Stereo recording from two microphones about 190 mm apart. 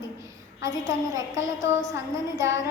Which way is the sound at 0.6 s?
20° right (ahead or behind).